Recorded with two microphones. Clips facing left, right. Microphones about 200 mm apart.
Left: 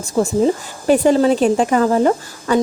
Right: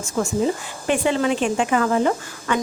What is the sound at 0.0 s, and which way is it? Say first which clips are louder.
A woman's voice: left 6 dB; 35° left (ahead or behind).